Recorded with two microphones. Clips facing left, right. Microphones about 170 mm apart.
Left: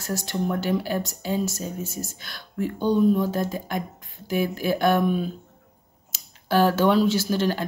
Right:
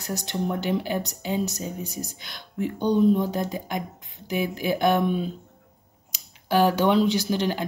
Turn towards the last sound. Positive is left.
turn(degrees=-15)  # may be behind; listen again after turning